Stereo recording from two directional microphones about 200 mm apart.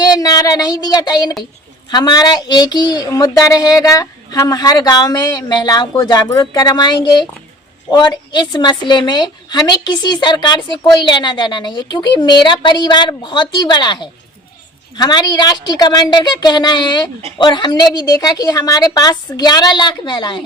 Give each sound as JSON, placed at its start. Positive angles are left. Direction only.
{"t": 0.0, "sound": "speech", "side_deg": 20}